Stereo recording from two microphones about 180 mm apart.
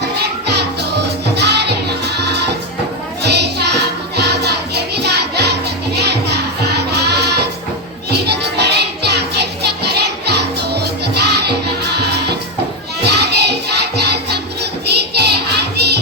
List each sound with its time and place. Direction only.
0.2 s music: 65° right (ahead or behind)